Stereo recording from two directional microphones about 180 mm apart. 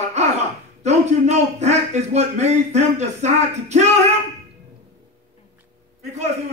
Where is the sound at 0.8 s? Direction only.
40° right (ahead or behind).